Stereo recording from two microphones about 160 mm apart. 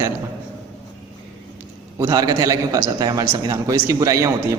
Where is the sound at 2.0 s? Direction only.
25° right (ahead or behind).